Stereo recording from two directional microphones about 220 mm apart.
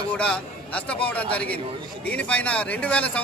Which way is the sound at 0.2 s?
5° left (ahead or behind).